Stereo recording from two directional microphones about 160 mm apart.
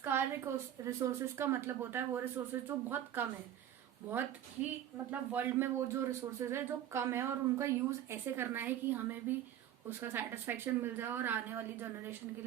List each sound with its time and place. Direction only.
0.0 s speech: 15° right (ahead or behind)
5.1 s speech: 10° right (ahead or behind)